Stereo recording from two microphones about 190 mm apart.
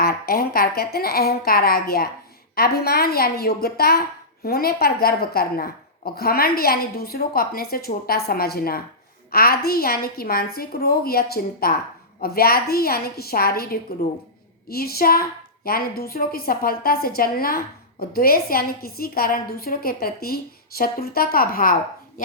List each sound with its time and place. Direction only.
0.0 s a woman's voice: 50° left (ahead or behind)